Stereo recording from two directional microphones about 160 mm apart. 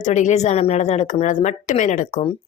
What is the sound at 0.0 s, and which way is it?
Speech, 50° left (ahead or behind).